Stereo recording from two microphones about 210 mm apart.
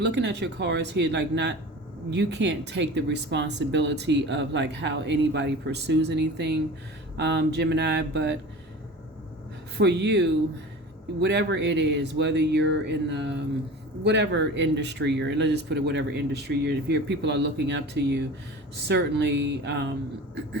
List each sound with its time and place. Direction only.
0.0 s speech: 55° right (ahead or behind)
9.7 s speech: 55° right (ahead or behind)